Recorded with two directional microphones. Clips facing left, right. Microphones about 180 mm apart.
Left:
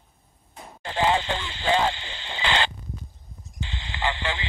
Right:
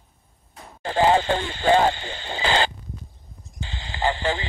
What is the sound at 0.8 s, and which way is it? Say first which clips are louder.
Radio: right 5 dB; 40° right (ahead or behind).